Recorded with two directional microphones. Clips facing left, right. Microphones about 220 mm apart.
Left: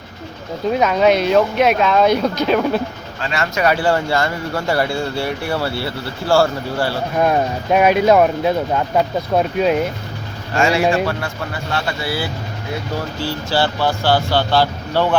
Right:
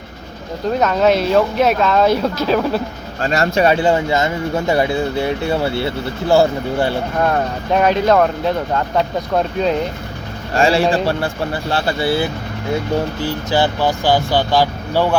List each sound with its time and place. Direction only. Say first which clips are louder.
0.8 s speech: even; 5° left (ahead or behind)
3.2 s speech: right 5 dB; 40° right (ahead or behind); by 7.0 s 20° right (ahead or behind)
7.2 s speech: left 3 dB; 15° left (ahead or behind)
10.5 s speech: right 1 dB; 30° right (ahead or behind); by 15.1 s 10° right (ahead or behind)